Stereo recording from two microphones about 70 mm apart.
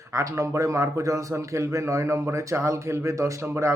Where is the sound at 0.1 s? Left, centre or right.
Right.